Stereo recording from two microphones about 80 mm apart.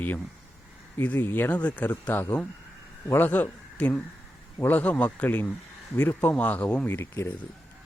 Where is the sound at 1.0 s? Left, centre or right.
Left.